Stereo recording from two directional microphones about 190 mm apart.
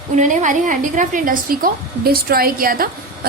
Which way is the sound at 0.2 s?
40° right (ahead or behind).